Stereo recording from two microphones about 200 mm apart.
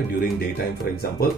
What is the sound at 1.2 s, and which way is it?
Speech, 50° left (ahead or behind).